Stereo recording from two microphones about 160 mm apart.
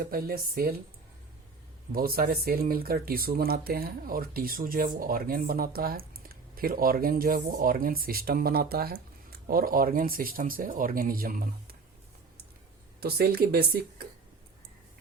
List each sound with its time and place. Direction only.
0.1 s speech: 65° right (ahead or behind)
1.9 s speech: 70° right (ahead or behind)
13.0 s speech: 75° right (ahead or behind)